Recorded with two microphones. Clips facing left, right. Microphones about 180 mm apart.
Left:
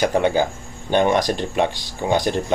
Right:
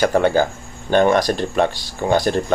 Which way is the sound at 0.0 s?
15° left (ahead or behind).